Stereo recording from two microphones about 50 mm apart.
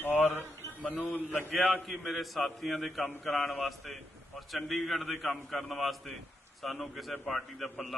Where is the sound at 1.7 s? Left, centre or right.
Centre.